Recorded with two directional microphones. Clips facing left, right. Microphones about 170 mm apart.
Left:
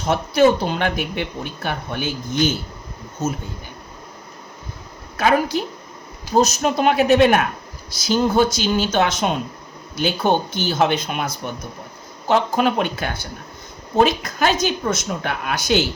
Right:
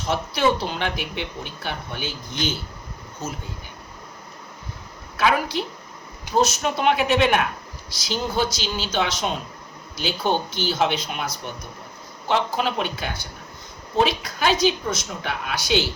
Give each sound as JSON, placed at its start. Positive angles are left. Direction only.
{"t": 0.1, "sound": "speech", "side_deg": 45}
{"t": 5.1, "sound": "a woman's voice", "side_deg": 45}